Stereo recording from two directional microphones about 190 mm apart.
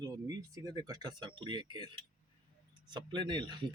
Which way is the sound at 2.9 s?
25° right (ahead or behind).